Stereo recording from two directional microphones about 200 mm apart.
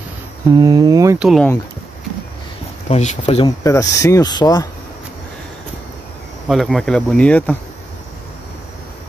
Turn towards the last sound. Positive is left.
turn(degrees=5)  # may be behind; listen again after turning